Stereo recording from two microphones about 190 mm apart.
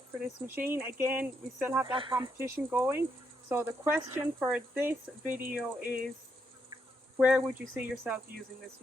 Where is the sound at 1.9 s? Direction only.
25° right (ahead or behind).